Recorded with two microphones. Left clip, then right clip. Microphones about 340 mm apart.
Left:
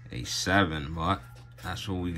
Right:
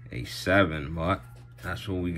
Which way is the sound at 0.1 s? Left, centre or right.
Centre.